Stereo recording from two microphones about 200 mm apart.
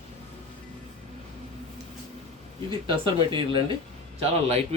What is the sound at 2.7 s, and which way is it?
Speech, 25° right (ahead or behind).